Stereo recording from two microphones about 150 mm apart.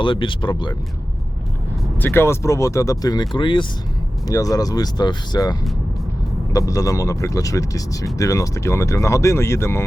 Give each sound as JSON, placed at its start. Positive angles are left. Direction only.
{"t": 0.0, "sound": "speech", "side_deg": 35}
{"t": 2.0, "sound": "speech", "side_deg": 15}